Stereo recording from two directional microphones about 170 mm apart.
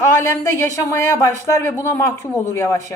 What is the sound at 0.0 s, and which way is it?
A woman's voice, 15° left (ahead or behind).